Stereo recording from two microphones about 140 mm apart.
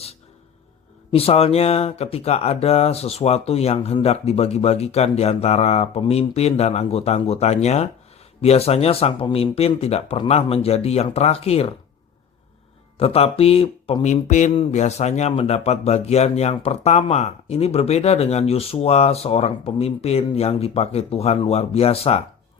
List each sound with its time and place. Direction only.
1.1 s speech: 45° left (ahead or behind)
13.0 s speech: 45° left (ahead or behind)
14.5 s speech: 40° left (ahead or behind)
14.8 s speech: 55° left (ahead or behind)